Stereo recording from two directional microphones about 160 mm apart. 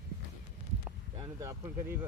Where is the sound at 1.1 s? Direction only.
20° right (ahead or behind).